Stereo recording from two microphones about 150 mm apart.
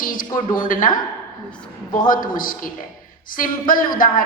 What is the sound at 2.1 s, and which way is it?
A woman's voice, 65° left (ahead or behind).